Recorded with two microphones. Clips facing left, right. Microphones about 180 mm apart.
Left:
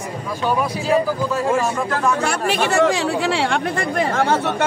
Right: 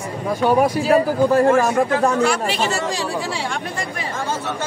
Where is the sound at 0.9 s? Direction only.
55° right (ahead or behind).